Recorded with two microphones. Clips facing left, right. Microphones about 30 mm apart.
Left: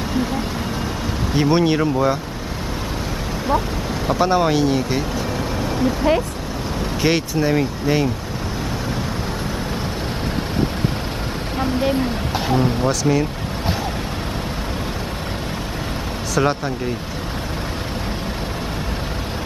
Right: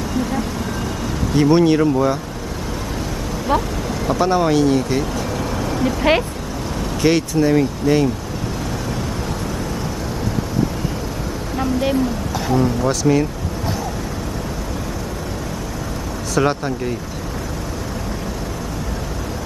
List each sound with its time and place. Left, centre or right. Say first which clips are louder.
1.3 s speech: right 3 dB; centre
4.1 s speech: right 1 dB; centre
5.6 s vehicle: even; centre
7.0 s speech: right 3 dB; centre
11.9 s speech: right 1 dB; left
12.8 s speech: right 2 dB; centre
16.3 s speech: right 1 dB; centre